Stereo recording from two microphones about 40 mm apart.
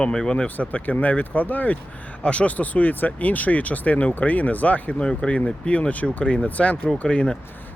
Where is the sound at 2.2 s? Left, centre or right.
Left.